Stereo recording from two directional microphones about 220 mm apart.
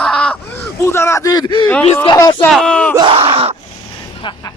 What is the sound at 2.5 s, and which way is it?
Speech, 5° left (ahead or behind).